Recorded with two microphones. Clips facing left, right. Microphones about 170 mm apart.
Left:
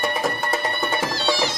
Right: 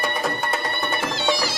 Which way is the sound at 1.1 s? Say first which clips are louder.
Even; 20° right (ahead or behind).